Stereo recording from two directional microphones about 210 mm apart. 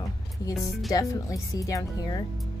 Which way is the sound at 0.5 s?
Centre (ahead or behind).